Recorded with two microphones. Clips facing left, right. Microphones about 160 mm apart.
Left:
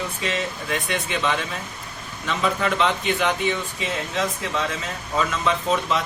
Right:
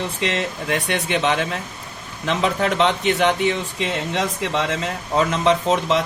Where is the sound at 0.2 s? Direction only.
75° right (ahead or behind).